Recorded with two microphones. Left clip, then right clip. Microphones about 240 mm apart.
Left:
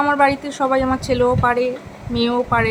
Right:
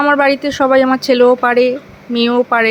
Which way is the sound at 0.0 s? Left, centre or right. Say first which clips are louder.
Right 4 dB; centre.